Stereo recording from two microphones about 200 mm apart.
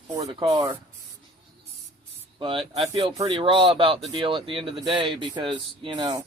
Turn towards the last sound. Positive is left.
turn(degrees=-25)  # may be behind; listen again after turning